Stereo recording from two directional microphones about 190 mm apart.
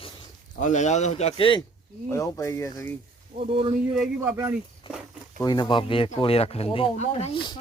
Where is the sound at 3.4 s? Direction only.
30° right (ahead or behind).